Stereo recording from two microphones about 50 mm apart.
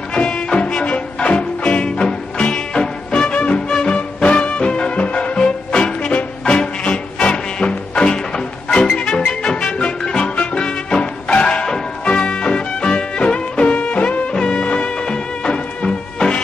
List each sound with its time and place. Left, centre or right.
0.1 s music: centre
9.3 s music: centre